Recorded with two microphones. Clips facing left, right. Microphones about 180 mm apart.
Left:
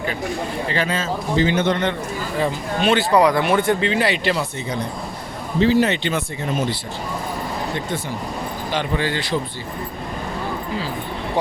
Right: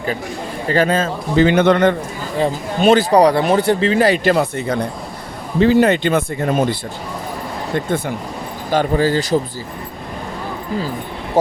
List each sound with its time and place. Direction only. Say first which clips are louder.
0.7 s a man's voice: right 9 dB; 45° right (ahead or behind); by 1.9 s 65° right (ahead or behind)
2.8 s speech: right 5 dB; 40° right (ahead or behind)
7.9 s a man's voice: right 6 dB; 55° right (ahead or behind)
8.7 s speech: right 8 dB; 40° right (ahead or behind)